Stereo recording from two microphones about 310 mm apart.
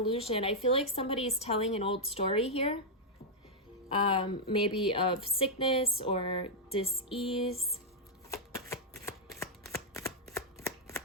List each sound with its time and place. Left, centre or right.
0.1 s a woman's voice: centre
3.8 s a woman's voice: centre
7.5 s speech: centre
8.3 s shuffling cards: centre